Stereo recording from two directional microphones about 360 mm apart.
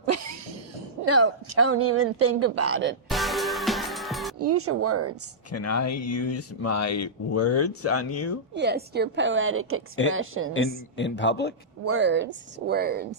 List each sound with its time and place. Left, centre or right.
0.0 s cough: right
1.0 s a woman's voice: right
3.1 s music: centre
4.4 s a woman's voice: right
5.5 s speech: left
8.5 s a woman's voice: right
10.9 s speech: left
11.9 s speech: right